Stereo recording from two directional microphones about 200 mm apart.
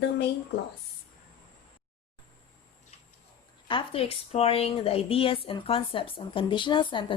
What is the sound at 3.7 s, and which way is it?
A woman's voice, 25° left (ahead or behind).